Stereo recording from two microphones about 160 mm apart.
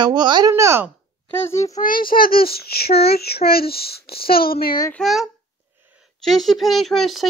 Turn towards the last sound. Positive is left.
turn(degrees=0)  # may be behind; listen again after turning